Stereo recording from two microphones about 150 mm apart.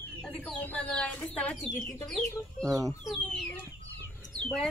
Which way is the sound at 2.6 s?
25° right (ahead or behind).